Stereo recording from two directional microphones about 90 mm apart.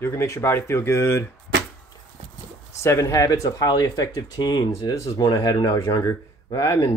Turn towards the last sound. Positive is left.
turn(degrees=45)  # may be behind; listen again after turning